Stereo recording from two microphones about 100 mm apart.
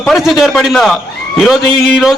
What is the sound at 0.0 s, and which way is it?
A man's voice, centre (ahead or behind).